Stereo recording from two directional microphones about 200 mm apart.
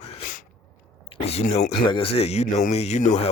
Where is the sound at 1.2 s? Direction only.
30° left (ahead or behind).